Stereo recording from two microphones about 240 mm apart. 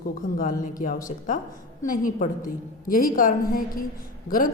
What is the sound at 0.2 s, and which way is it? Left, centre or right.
Speech, left.